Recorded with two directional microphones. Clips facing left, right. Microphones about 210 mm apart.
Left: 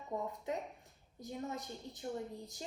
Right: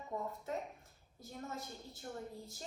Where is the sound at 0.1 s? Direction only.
15° left (ahead or behind).